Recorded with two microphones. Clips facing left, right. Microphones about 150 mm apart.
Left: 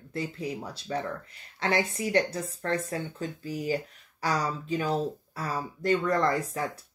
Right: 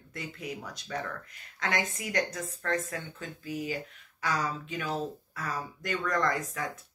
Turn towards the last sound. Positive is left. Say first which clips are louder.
# left 3 dB
turn(degrees=30)  # may be behind; listen again after turning